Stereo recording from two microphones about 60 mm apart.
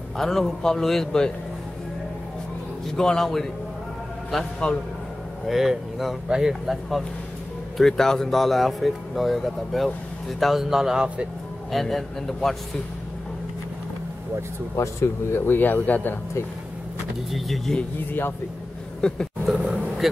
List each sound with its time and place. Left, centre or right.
0.2 s speech: centre
3.0 s a man's voice: centre
4.6 s a man's voice: centre
5.5 s speech: centre
7.7 s speech: centre
11.7 s speech: centre
14.8 s speech: left
15.4 s speech: left
17.3 s speech: centre
18.9 s roaring cats: centre
19.6 s a sound: right